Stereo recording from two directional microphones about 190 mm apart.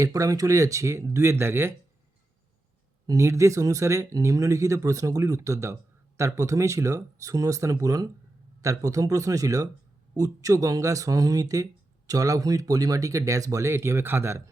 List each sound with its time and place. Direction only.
0.0 s speech: 15° right (ahead or behind)
3.1 s speech: 15° right (ahead or behind)